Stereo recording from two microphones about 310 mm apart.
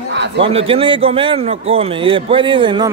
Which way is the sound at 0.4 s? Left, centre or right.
Centre.